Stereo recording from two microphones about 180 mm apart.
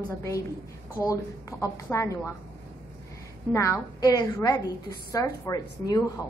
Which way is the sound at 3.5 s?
15° left (ahead or behind).